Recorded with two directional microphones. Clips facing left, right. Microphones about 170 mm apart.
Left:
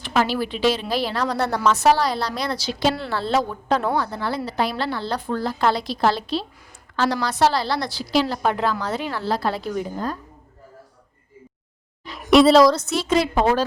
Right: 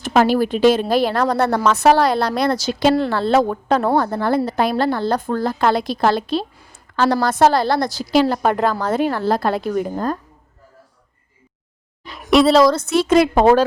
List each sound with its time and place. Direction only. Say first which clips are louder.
0.0 s a woman's voice: right 6 dB; 50° right (ahead or behind)
12.2 s a woman's voice: even; centre (ahead or behind)
12.8 s a woman's voice: right 6 dB; 55° right (ahead or behind)